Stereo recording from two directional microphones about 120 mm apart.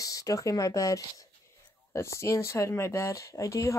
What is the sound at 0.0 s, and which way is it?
Speech, 30° left (ahead or behind).